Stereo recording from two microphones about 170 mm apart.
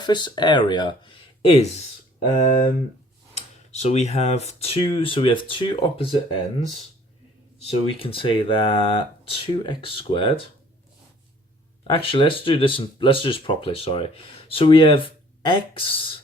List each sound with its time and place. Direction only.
0.0 s speech: 25° left (ahead or behind)
2.1 s speech: 45° left (ahead or behind)
3.7 s speech: 40° left (ahead or behind)
11.9 s speech: 30° left (ahead or behind)